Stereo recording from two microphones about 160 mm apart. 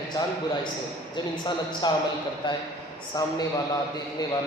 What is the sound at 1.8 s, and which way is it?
Speech, 25° left (ahead or behind).